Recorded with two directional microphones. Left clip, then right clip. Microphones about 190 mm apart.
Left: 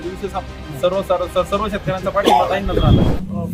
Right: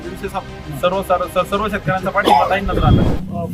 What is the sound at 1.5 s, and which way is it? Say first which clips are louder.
Speech: right 1 dB; 20° left (ahead or behind).